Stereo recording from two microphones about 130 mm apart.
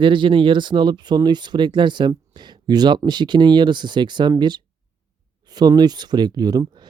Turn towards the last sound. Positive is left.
turn(degrees=-30)  # may be behind; listen again after turning